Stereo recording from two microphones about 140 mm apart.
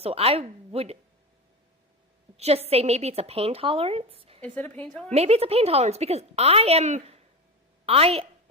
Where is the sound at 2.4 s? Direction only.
45° right (ahead or behind).